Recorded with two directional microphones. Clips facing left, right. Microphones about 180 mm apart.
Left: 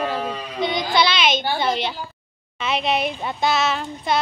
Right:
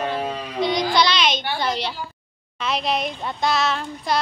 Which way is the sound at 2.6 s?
5° left (ahead or behind).